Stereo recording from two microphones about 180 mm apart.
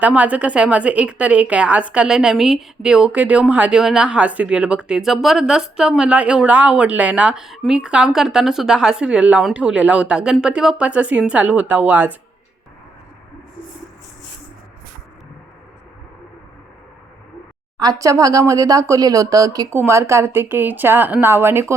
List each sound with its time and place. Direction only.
0.0 s speech: 10° right (ahead or behind)
17.7 s speech: 20° right (ahead or behind)